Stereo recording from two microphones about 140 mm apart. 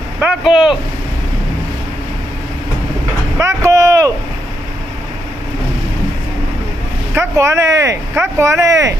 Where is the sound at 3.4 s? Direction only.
20° right (ahead or behind).